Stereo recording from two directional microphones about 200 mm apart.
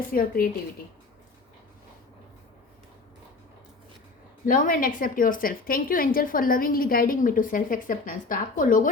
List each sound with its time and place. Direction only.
0.1 s a woman's voice: 45° left (ahead or behind)
4.4 s a woman's voice: 45° left (ahead or behind)